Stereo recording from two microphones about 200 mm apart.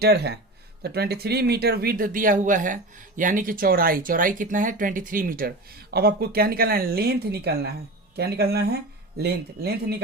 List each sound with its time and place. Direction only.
0.0 s speech: 55° right (ahead or behind)